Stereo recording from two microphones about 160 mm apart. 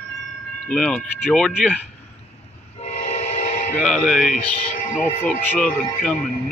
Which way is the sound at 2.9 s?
45° left (ahead or behind).